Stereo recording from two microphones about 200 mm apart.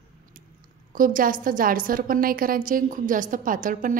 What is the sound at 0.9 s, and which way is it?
A woman's voice, 45° right (ahead or behind).